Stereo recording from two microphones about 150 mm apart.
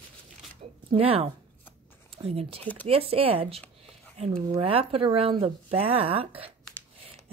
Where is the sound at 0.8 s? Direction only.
40° right (ahead or behind).